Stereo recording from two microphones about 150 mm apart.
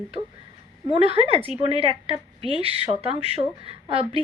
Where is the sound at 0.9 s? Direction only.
40° right (ahead or behind).